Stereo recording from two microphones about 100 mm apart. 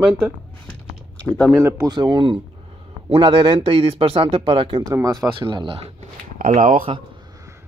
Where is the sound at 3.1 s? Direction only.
70° right (ahead or behind); by 5.8 s 50° right (ahead or behind).